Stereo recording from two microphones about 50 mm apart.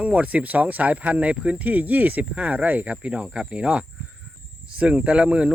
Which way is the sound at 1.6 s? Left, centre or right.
Right.